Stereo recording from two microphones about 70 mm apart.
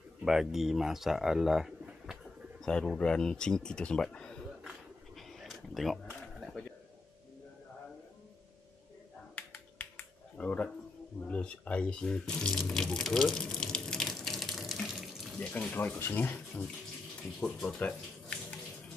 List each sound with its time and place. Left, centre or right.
0.2 s speech: centre
2.6 s speech: centre
4.6 s a sound: centre
9.3 s finger snapping: centre
11.2 s speech: centre
12.7 s water: centre
15.3 s speech: centre
15.7 s speech: left
17.4 s speech: centre
17.7 s water tap: centre